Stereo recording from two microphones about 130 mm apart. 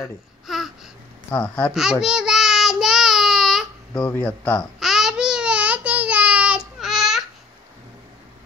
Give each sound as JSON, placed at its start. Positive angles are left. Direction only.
{"t": 0.5, "sound": "babbling", "side_deg": 0}
{"t": 1.3, "sound": "speech", "side_deg": 10}
{"t": 1.7, "sound": "child singing", "side_deg": -5}
{"t": 3.9, "sound": "speech", "side_deg": 15}
{"t": 4.7, "sound": "babbling", "side_deg": 0}